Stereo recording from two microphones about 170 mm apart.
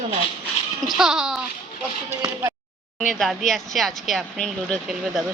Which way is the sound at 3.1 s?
Centre (ahead or behind).